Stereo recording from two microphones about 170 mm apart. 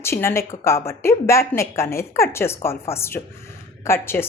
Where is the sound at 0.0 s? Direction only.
15° left (ahead or behind).